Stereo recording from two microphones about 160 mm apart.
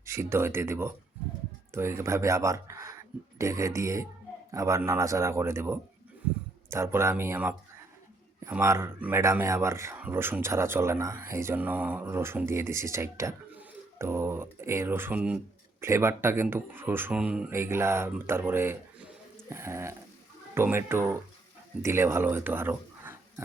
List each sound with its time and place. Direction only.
0.0 s speech: 15° right (ahead or behind)